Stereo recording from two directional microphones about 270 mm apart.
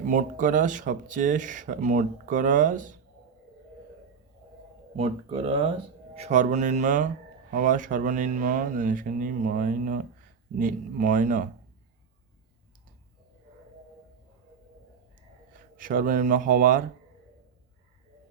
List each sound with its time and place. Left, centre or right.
0.0 s speech: right
4.9 s speech: right
15.5 s speech: right